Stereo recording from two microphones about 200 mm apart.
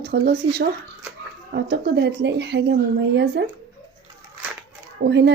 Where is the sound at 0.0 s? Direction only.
55° right (ahead or behind).